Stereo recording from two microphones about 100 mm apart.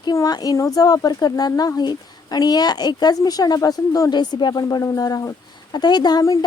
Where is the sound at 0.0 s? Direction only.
40° left (ahead or behind).